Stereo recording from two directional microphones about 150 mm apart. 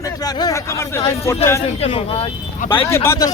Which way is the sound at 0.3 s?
20° left (ahead or behind).